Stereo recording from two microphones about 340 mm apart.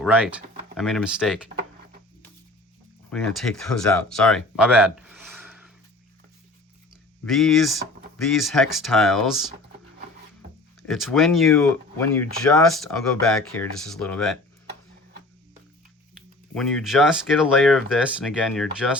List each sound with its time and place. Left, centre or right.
0.0 s speech: centre
3.1 s speech: centre
7.3 s speech: centre
10.8 s speech: centre
16.6 s speech: centre